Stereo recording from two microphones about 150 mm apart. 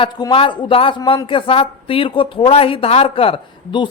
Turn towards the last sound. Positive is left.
turn(degrees=35)  # may be behind; listen again after turning